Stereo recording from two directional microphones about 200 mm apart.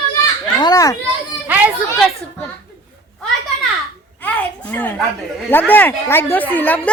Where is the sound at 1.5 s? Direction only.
10° right (ahead or behind).